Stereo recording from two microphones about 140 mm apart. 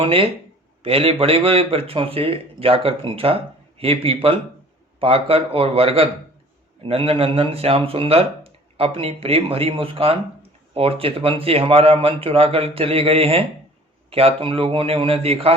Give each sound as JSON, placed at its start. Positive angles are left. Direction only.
{"t": 0.0, "sound": "speech", "side_deg": -40}